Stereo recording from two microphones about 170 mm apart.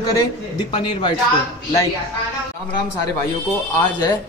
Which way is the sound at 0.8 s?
25° left (ahead or behind).